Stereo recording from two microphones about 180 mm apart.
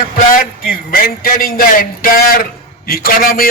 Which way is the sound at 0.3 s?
50° left (ahead or behind).